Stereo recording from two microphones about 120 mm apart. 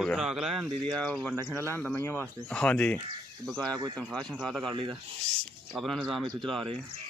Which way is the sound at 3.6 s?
35° right (ahead or behind).